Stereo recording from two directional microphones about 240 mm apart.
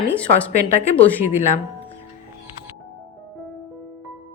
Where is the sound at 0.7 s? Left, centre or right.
Left.